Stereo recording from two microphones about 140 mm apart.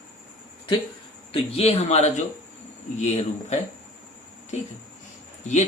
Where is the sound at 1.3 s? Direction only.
45° left (ahead or behind).